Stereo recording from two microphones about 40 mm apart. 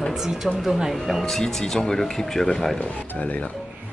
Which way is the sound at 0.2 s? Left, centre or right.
Centre.